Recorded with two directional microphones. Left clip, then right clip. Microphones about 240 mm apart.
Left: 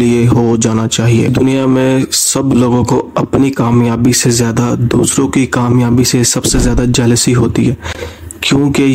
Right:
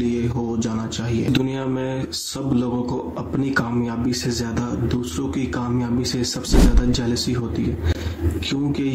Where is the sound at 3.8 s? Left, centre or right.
Left.